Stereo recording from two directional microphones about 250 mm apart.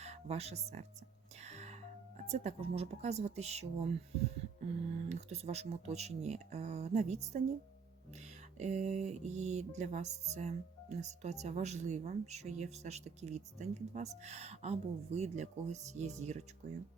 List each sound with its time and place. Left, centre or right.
0.0 s speech: right
1.5 s music: right
2.3 s speech: right
5.0 s speech: right
8.5 s speech: right